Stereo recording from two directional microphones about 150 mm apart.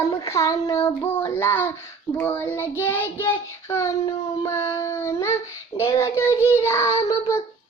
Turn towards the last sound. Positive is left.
turn(degrees=20)  # may be behind; listen again after turning